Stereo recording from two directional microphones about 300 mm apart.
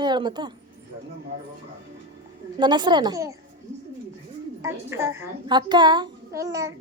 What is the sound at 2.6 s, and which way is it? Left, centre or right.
Speech, centre.